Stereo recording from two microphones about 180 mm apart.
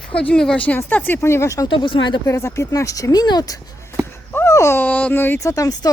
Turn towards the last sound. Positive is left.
turn(degrees=20)  # may be behind; listen again after turning